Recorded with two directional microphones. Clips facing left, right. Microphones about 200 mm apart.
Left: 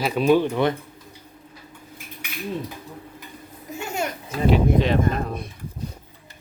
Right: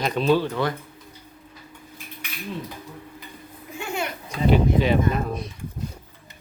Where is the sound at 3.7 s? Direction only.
40° left (ahead or behind).